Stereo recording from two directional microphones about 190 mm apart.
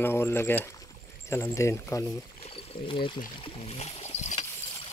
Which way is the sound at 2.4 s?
30° left (ahead or behind).